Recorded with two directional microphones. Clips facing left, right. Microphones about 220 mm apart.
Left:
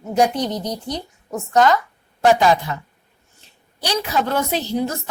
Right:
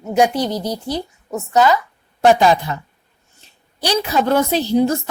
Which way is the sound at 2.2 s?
30° right (ahead or behind).